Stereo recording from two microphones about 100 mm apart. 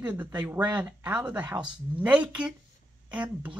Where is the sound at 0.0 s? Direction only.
20° right (ahead or behind).